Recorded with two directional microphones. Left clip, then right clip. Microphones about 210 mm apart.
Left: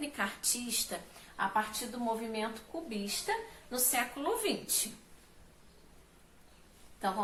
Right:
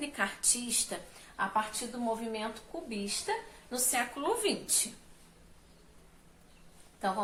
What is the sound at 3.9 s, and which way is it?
Speech, 20° right (ahead or behind).